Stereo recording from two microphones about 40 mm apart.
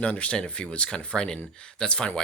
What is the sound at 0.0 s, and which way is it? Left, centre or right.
Speech, left.